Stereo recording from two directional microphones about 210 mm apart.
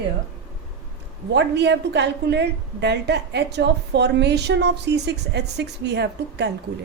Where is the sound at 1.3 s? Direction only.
55° right (ahead or behind).